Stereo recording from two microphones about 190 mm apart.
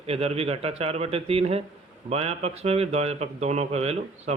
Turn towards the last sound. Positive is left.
turn(degrees=-35)  # may be behind; listen again after turning